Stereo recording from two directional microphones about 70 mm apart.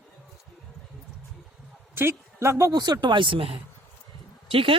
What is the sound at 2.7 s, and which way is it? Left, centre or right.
Speech, right.